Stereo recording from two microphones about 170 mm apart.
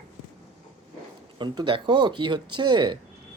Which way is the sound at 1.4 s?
30° right (ahead or behind).